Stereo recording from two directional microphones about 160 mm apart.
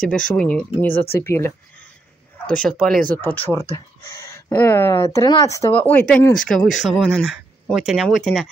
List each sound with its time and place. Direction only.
0.4 s speech: 5° left (ahead or behind)
0.8 s speech: 75° left (ahead or behind)
1.2 s speech: 15° left (ahead or behind)
2.4 s speech: 5° left (ahead or behind)